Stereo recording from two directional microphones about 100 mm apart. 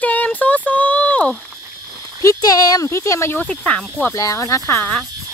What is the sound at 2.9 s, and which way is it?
Speech, 30° left (ahead or behind).